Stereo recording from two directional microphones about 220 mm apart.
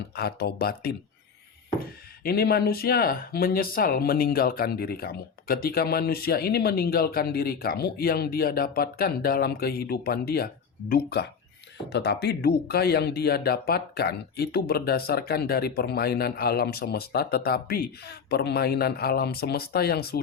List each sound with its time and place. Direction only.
0.2 s speech: 45° left (ahead or behind)
2.2 s speech: 45° left (ahead or behind)